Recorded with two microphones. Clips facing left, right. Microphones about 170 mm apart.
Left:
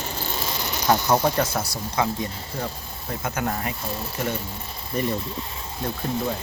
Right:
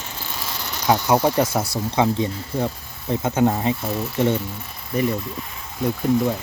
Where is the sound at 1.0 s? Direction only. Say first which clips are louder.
Right 3 dB; 15° right (ahead or behind).